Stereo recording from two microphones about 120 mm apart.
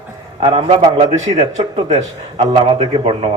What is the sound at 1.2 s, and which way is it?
Speech, 70° right (ahead or behind).